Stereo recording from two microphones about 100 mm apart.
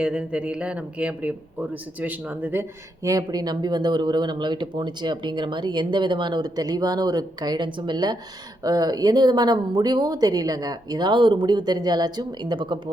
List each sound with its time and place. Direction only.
0.0 s speech: 10° right (ahead or behind)
3.0 s speech: 35° right (ahead or behind)